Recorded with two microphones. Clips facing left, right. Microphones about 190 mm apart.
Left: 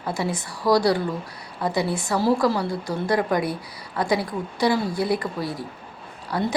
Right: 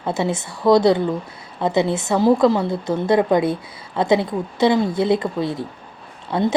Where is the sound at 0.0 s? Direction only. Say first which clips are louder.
Right 5 dB; 25° right (ahead or behind).